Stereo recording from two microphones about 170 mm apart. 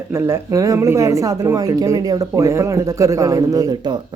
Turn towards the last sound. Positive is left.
turn(degrees=-25)  # may be behind; listen again after turning